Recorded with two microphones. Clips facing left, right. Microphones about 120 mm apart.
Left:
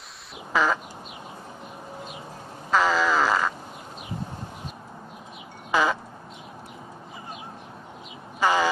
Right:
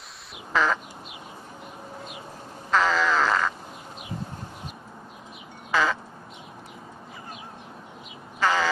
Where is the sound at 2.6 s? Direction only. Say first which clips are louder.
Left 1 dB; 10° left (ahead or behind).